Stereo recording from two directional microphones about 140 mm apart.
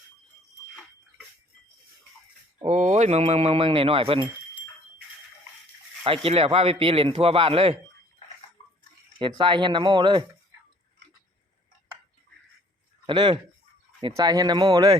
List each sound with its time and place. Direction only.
2.6 s a man's voice: 60° right (ahead or behind); by 4.3 s 40° right (ahead or behind)
6.1 s a man's voice: 45° right (ahead or behind)
9.1 s speech: 35° right (ahead or behind)
13.1 s speech: 35° right (ahead or behind)